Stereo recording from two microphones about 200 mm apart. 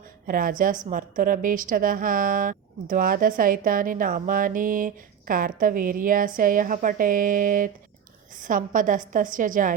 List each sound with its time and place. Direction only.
0.3 s a woman's voice: 45° right (ahead or behind)